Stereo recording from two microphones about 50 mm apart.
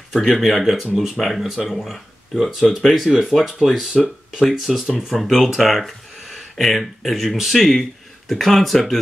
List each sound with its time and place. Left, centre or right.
0.1 s speech: centre
3.2 s speech: centre
5.6 s a sound: centre
6.6 s speech: centre